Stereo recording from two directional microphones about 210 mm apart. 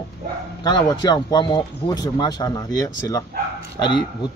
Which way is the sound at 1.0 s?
20° left (ahead or behind).